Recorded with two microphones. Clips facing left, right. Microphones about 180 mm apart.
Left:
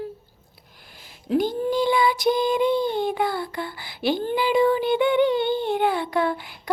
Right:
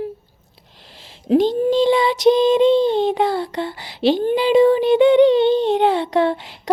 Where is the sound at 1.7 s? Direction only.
85° right.